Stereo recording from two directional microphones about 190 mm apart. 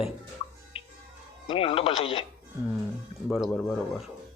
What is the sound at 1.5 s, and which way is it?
Speech, 30° left (ahead or behind).